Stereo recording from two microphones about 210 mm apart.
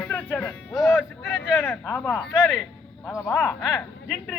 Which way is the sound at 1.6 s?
10° left (ahead or behind).